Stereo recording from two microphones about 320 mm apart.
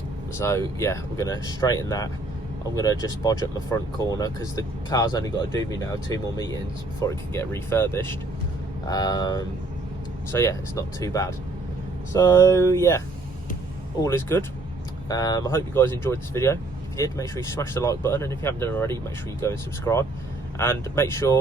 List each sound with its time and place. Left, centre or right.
0.3 s speech: centre
14.0 s speech: centre